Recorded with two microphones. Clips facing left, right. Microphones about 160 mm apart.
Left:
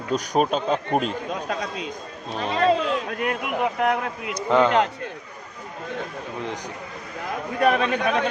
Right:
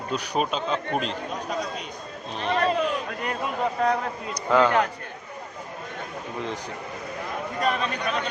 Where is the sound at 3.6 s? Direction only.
20° left (ahead or behind).